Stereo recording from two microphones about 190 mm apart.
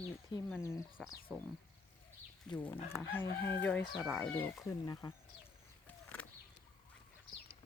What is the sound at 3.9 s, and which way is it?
Speech, centre (ahead or behind).